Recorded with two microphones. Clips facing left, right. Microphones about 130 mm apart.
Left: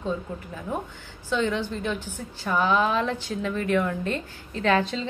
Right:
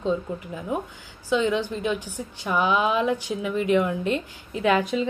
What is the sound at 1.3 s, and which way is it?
A woman's voice, 15° right (ahead or behind).